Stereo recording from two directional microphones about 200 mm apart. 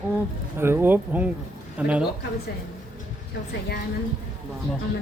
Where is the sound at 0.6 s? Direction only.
10° right (ahead or behind).